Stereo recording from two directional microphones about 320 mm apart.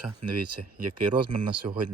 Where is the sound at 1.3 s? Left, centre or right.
Centre.